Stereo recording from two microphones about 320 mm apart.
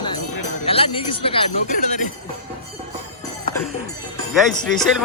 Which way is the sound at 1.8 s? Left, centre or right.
Left.